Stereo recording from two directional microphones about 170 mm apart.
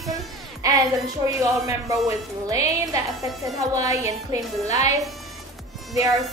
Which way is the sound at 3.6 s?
20° right (ahead or behind).